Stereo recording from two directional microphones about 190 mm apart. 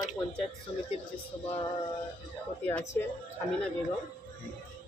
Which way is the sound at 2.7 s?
10° left (ahead or behind).